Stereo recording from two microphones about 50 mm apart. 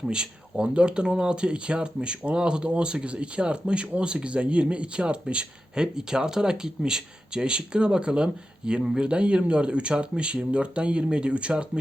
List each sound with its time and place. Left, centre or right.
0.0 s speech: centre